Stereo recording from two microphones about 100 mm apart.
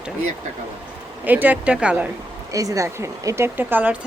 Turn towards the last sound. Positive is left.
turn(degrees=-20)  # may be behind; listen again after turning